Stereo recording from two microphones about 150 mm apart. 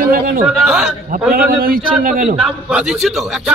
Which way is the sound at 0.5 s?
Centre (ahead or behind).